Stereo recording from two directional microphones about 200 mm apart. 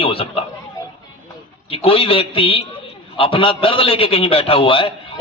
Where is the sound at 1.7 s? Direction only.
30° left (ahead or behind).